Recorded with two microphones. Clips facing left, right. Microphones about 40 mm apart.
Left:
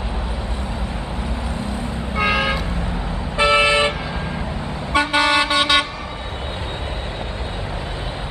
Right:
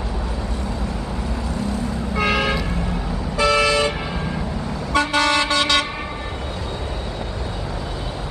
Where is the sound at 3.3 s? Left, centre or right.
Left.